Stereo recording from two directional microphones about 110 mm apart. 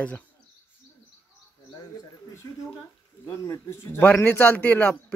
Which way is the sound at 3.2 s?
25° left (ahead or behind).